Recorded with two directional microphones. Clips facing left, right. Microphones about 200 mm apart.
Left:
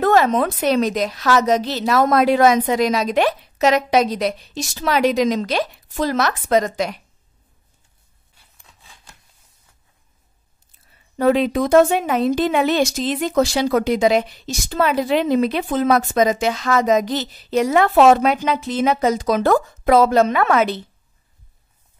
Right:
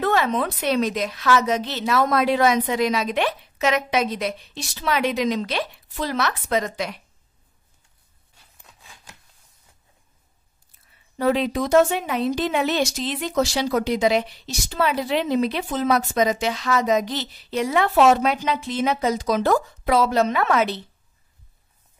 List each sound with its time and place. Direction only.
0.0 s a woman's voice: 45° left (ahead or behind)
11.1 s speech: 55° left (ahead or behind)